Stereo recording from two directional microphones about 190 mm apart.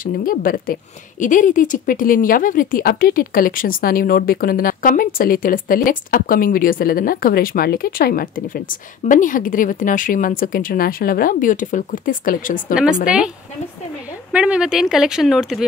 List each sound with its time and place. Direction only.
0.0 s speech: 45° left (ahead or behind)
13.0 s speech: 5° right (ahead or behind)
14.3 s speech: 5° right (ahead or behind)